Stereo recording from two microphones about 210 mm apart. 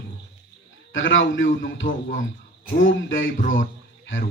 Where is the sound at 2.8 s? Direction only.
65° left (ahead or behind).